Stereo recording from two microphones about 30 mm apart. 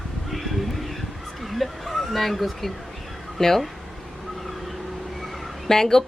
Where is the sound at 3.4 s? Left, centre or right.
Centre.